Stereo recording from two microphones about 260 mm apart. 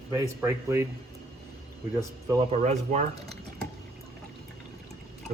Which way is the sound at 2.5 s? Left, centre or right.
Right.